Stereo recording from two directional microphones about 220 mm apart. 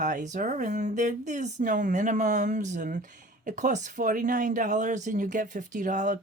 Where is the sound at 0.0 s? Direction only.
35° right (ahead or behind).